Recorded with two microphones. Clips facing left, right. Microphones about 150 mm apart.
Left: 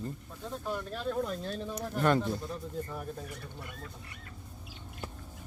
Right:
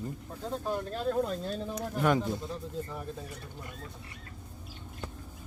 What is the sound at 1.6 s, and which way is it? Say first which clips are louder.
Speech: even; 10° right (ahead or behind).